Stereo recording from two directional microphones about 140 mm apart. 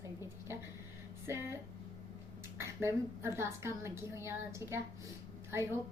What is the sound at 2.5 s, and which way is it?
A woman's voice, 20° right (ahead or behind).